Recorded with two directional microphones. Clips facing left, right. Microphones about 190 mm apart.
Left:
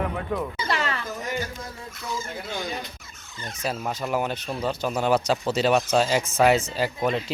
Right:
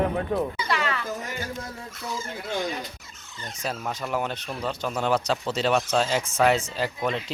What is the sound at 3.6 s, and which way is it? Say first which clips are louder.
Speech: left 2 dB; 5° left (ahead or behind).